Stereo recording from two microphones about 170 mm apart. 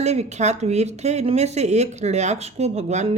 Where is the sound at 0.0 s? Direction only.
40° right (ahead or behind).